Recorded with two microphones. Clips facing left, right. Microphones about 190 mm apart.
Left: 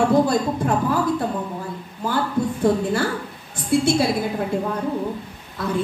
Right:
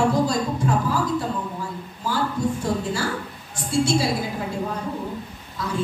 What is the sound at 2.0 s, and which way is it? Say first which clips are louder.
A woman's voice: left 2 dB; 55° left (ahead or behind).